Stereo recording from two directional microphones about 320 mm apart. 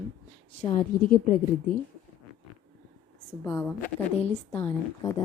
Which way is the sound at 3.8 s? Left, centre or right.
Centre.